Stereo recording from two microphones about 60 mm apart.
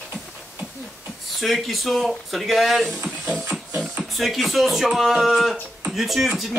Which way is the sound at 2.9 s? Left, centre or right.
Right.